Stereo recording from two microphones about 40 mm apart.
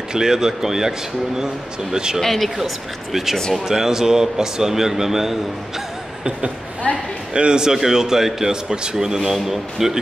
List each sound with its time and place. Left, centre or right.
0.1 s a man's voice: centre
2.1 s a man's voice: centre
7.3 s a man's voice: right